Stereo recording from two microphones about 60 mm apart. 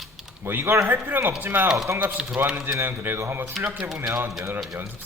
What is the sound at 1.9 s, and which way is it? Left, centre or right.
Speech, right.